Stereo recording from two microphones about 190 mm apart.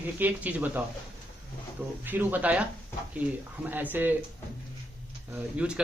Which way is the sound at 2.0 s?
10° right (ahead or behind).